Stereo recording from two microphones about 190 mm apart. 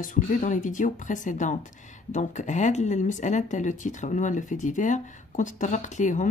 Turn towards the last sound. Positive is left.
turn(degrees=40)  # may be behind; listen again after turning